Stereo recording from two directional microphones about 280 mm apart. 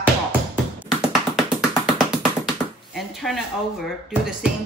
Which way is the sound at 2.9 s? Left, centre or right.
Centre.